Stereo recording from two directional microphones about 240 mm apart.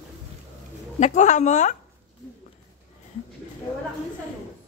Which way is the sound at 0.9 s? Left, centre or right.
Left.